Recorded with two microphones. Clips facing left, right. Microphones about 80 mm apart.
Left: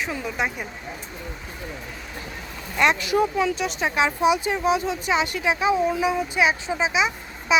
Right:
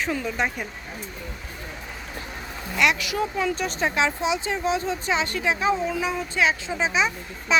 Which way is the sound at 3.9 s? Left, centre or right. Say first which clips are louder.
Left 6 dB; centre.